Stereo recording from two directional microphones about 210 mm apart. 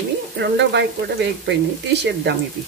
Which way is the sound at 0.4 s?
55° right (ahead or behind).